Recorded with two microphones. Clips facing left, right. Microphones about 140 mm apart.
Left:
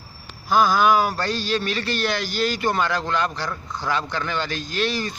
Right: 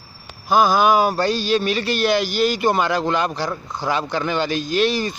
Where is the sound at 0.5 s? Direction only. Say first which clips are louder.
Right 2 dB; 15° right (ahead or behind).